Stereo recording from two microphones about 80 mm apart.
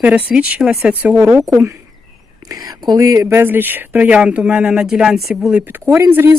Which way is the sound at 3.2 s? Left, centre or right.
Right.